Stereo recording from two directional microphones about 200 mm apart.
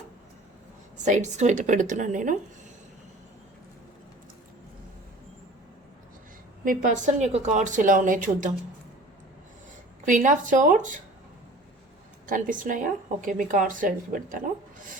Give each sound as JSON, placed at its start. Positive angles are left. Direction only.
{"t": 1.0, "sound": "speech", "side_deg": -35}
{"t": 6.7, "sound": "speech", "side_deg": -40}
{"t": 10.1, "sound": "speech", "side_deg": -40}
{"t": 12.2, "sound": "speech", "side_deg": -40}